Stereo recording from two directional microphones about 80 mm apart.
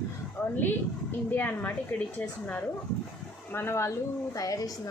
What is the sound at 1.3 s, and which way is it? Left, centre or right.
Speech, left.